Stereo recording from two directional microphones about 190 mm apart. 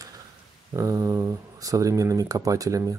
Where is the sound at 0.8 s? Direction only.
15° right (ahead or behind).